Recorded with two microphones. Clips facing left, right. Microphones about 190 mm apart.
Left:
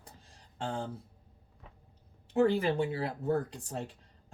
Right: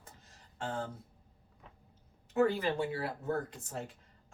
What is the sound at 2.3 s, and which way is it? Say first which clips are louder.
Speech: left 3 dB; 30° left (ahead or behind).